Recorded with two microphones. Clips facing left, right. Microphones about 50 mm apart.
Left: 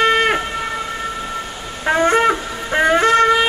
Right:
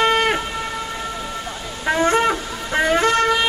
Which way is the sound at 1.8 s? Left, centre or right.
Centre.